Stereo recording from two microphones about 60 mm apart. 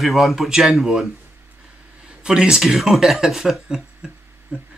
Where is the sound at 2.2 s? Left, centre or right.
Centre.